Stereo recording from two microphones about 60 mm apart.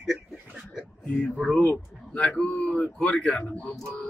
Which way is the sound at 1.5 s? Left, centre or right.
Left.